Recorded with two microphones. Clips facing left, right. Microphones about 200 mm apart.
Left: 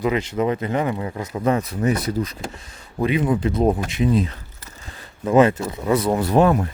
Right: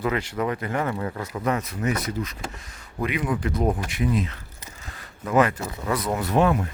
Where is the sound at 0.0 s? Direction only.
20° left (ahead or behind).